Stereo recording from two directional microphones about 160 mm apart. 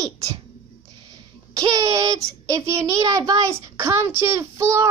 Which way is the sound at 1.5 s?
25° right (ahead or behind).